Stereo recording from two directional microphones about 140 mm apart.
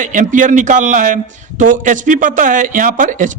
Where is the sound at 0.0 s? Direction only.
65° right (ahead or behind).